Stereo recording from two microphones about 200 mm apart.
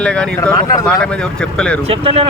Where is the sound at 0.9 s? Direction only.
5° left (ahead or behind).